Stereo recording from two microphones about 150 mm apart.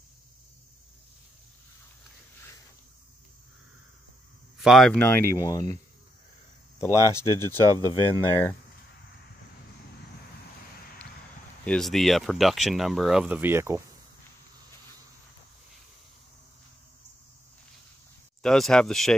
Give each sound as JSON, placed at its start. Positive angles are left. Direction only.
{"t": 4.6, "sound": "speech", "side_deg": 0}
{"t": 4.9, "sound": "speech", "side_deg": 15}
{"t": 7.0, "sound": "speech", "side_deg": 20}
{"t": 11.6, "sound": "speech", "side_deg": 5}
{"t": 18.4, "sound": "speech", "side_deg": 5}